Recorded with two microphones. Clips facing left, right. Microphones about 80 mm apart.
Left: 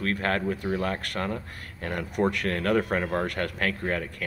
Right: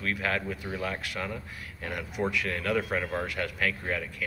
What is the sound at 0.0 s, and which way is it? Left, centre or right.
Speech, left.